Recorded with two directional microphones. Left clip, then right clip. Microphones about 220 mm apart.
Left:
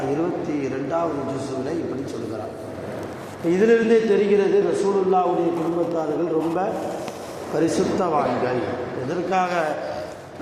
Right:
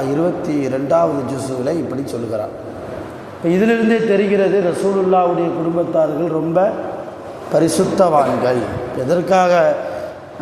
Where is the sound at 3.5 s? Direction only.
40° right (ahead or behind).